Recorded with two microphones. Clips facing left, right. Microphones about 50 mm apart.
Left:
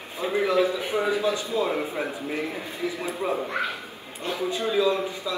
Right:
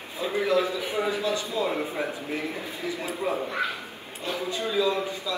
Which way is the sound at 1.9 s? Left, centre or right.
Centre.